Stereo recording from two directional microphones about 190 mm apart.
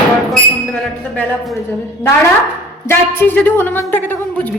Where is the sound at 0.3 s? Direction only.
5° left (ahead or behind).